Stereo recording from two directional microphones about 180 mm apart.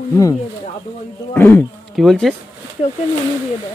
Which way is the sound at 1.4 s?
10° left (ahead or behind).